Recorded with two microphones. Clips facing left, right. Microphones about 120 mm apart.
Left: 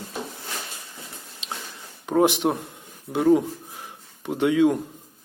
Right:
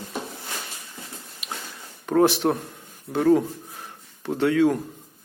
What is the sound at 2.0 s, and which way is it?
Speech, 15° left (ahead or behind).